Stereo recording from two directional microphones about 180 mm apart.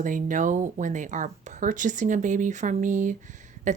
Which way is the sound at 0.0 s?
45° right (ahead or behind).